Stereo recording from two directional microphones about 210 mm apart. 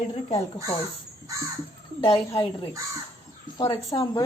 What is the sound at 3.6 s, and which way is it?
Speech, 25° left (ahead or behind).